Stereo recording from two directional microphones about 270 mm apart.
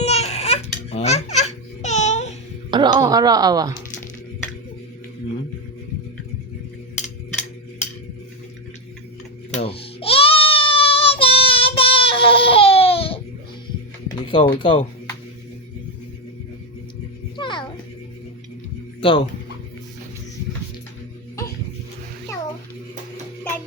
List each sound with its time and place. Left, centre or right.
0.0 s music: left
2.6 s speech: centre
9.5 s baby cry: left
14.1 s music: centre
14.6 s speech: centre
17.3 s music: centre